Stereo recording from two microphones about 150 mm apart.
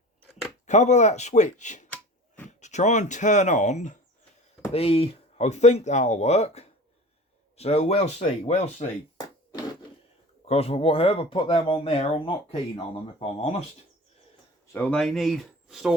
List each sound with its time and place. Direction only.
0.7 s speech: 50° left (ahead or behind)
4.7 s speech: 40° left (ahead or behind)
9.1 s a sound: 25° left (ahead or behind)
10.4 s speech: 40° left (ahead or behind)
14.7 s speech: 10° left (ahead or behind)